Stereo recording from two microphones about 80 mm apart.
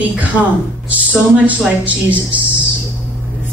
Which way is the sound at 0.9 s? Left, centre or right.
Centre.